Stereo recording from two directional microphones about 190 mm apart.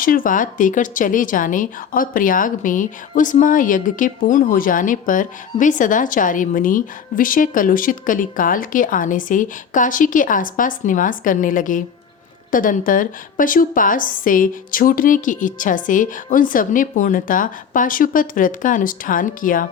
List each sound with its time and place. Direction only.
0.0 s speech: 45° left (ahead or behind)